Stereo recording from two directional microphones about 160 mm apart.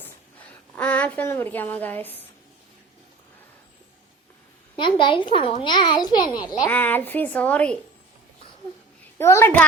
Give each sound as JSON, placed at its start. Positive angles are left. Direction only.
{"t": 0.8, "sound": "a woman's voice", "side_deg": 10}
{"t": 4.8, "sound": "a child's voice", "side_deg": 30}
{"t": 6.7, "sound": "a woman's voice", "side_deg": 10}
{"t": 9.1, "sound": "a woman's voice", "side_deg": 15}